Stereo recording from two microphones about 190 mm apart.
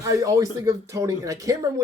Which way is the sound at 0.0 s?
15° right (ahead or behind).